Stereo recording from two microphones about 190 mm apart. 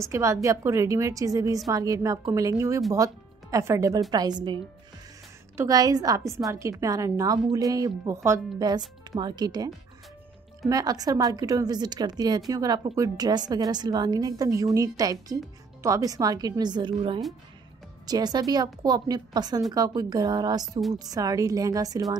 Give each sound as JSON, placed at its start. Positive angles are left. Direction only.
{"t": 0.0, "sound": "a woman's voice", "side_deg": -15}
{"t": 5.6, "sound": "a woman's voice", "side_deg": -20}
{"t": 10.7, "sound": "a woman's voice", "side_deg": -20}